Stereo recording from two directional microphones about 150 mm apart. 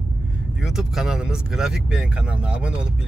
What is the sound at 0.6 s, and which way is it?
Speech, 5° right (ahead or behind).